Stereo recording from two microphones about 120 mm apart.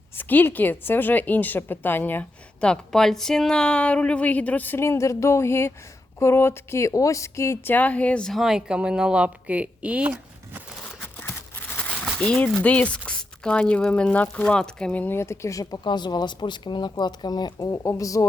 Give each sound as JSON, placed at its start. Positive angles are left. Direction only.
{"t": 0.2, "sound": "a woman's voice", "side_deg": 15}
{"t": 11.0, "sound": "a sound", "side_deg": 15}
{"t": 12.2, "sound": "a woman's voice", "side_deg": 10}